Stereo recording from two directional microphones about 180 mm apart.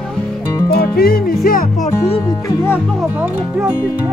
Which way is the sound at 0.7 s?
60° left (ahead or behind).